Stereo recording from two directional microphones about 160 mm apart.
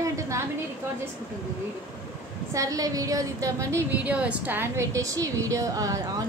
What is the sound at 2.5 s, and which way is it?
A woman's voice, 20° right (ahead or behind).